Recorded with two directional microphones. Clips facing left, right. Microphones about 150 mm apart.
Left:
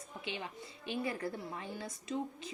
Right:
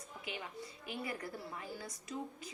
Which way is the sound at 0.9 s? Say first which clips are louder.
Left 6 dB; 25° left (ahead or behind).